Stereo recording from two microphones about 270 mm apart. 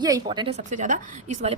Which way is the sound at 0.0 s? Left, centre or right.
Centre.